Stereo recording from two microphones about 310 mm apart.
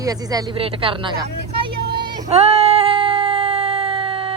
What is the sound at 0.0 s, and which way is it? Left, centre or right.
Speech, centre.